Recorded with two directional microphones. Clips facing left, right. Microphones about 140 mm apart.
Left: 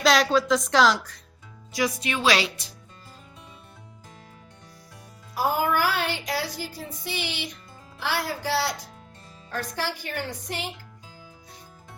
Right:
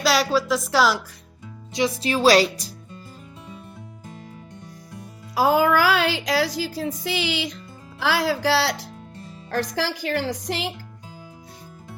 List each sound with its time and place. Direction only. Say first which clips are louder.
0.0 s a woman's voice: even; centre (ahead or behind)
1.7 s speech: right 4 dB; 25° right (ahead or behind)
5.3 s a woman's voice: right 6 dB; 90° right